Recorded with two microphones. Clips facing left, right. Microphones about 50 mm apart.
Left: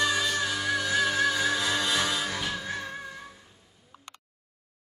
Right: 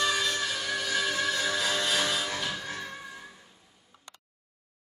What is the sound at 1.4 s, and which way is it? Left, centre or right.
Music, left.